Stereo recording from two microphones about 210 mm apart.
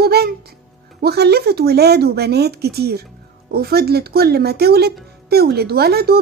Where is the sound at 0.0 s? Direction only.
50° right (ahead or behind).